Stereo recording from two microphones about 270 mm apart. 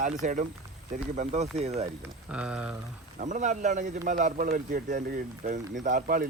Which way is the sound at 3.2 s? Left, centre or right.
Right.